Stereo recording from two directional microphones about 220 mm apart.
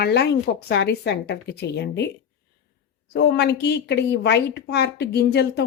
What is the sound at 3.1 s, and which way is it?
A woman's voice, 50° left (ahead or behind).